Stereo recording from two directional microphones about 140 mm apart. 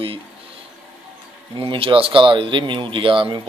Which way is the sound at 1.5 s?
40° right (ahead or behind).